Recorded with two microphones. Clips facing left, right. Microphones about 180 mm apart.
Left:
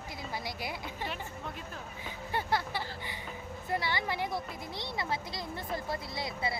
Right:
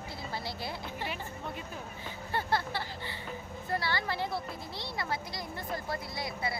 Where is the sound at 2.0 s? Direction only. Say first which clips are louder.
Even; 15° left (ahead or behind).